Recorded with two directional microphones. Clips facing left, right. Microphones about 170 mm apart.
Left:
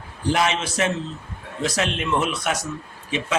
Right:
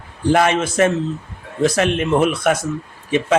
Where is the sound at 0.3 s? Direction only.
50° right (ahead or behind).